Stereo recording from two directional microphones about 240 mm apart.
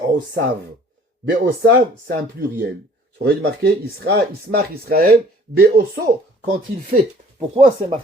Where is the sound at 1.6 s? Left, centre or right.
Right.